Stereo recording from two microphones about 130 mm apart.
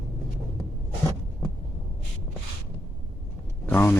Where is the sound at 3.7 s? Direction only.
15° left (ahead or behind).